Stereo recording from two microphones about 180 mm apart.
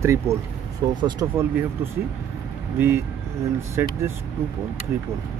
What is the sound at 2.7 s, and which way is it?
Speech, 10° right (ahead or behind).